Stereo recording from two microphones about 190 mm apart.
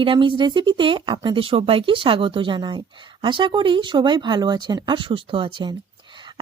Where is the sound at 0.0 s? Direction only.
25° right (ahead or behind).